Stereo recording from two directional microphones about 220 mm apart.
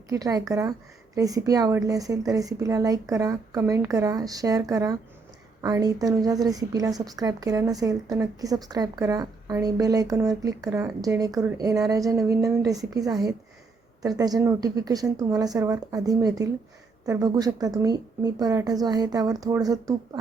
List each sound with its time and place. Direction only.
0.1 s a woman's voice: 15° right (ahead or behind)